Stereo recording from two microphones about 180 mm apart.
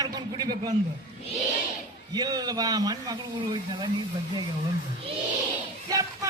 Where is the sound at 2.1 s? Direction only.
20° right (ahead or behind).